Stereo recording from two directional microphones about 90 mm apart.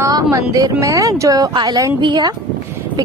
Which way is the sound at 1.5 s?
55° right (ahead or behind).